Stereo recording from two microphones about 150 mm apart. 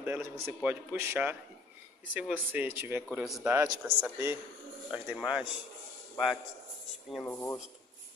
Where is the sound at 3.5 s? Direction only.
15° right (ahead or behind).